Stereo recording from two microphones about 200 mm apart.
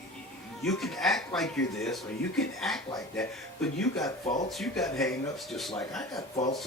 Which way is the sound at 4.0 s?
20° left (ahead or behind).